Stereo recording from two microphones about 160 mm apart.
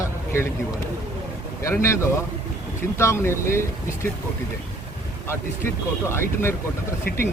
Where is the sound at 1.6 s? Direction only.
15° left (ahead or behind).